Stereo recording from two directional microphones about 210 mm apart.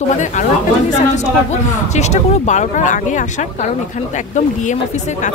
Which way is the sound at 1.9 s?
30° left (ahead or behind).